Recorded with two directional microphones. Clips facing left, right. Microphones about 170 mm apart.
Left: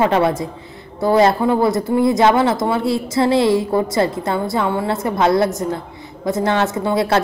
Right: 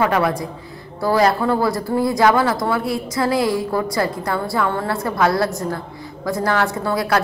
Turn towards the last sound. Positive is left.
turn(degrees=25)  # may be behind; listen again after turning